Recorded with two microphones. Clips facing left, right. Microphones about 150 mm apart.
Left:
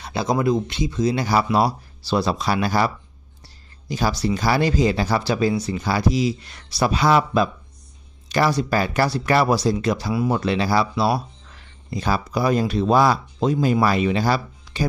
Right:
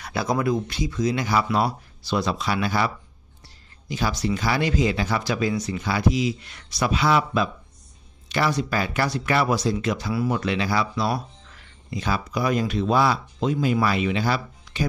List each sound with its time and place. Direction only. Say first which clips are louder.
0.0 s speech: left 3 dB; 25° left (ahead or behind)